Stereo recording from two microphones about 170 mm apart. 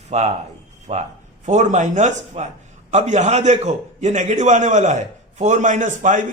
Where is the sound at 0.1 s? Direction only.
40° right (ahead or behind).